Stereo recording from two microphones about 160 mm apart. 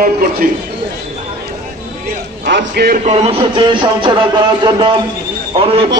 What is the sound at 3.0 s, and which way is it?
Music, 40° right (ahead or behind).